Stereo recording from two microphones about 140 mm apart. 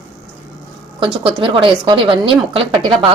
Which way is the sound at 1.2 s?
40° right (ahead or behind).